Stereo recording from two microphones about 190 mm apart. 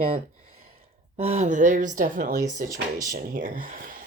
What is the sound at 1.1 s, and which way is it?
Speech, 35° right (ahead or behind).